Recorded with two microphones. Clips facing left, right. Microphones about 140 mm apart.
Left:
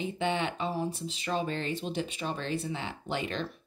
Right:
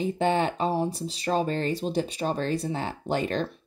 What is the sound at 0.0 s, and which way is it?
A woman's voice, 40° right (ahead or behind).